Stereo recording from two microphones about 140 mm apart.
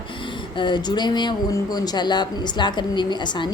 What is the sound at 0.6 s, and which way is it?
Speech, 30° left (ahead or behind).